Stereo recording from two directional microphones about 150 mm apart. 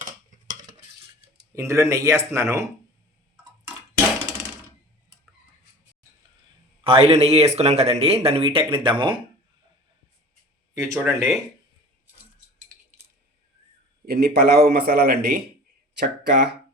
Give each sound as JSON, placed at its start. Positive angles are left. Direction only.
{"t": 1.5, "sound": "speech", "side_deg": -20}
{"t": 6.8, "sound": "speech", "side_deg": -40}
{"t": 10.9, "sound": "speech", "side_deg": 0}
{"t": 14.0, "sound": "a man's voice", "side_deg": -90}